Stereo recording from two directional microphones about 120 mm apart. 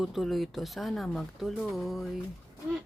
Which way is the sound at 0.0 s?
Centre (ahead or behind).